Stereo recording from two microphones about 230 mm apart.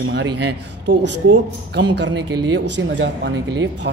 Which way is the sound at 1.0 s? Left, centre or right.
Right.